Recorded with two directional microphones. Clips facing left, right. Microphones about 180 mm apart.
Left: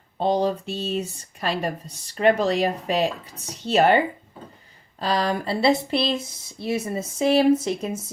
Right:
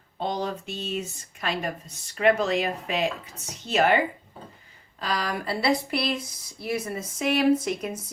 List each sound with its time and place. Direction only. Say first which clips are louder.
0.2 s speech: left 7 dB; 35° left (ahead or behind)
4.9 s speech: left 6 dB; 30° left (ahead or behind)